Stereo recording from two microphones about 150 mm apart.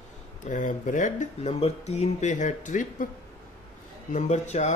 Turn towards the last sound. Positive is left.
turn(degrees=50)  # may be behind; listen again after turning